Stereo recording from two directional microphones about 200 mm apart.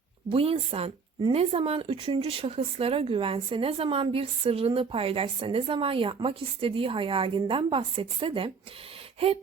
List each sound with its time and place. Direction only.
0.3 s speech: 30° right (ahead or behind)